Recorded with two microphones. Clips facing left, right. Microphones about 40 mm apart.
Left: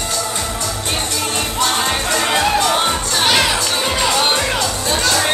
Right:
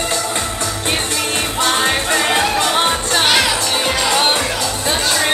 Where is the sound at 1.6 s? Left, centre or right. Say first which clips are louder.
Right 3 dB; right.